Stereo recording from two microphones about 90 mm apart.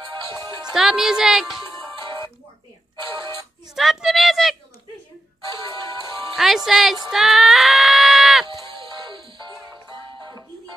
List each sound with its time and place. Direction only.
0.1 s speech: 55° right (ahead or behind)
0.7 s speech: 5° right (ahead or behind)
3.6 s a sound: 5° right (ahead or behind)
6.3 s speech: 5° right (ahead or behind)
8.5 s music: 55° right (ahead or behind)